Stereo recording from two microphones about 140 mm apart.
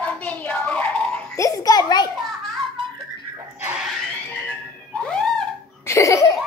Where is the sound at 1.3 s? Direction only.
25° left (ahead or behind).